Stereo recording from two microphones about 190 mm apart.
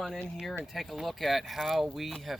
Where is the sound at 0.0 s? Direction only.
Centre (ahead or behind).